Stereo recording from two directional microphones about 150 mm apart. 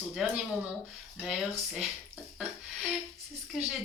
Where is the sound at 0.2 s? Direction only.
5° right (ahead or behind).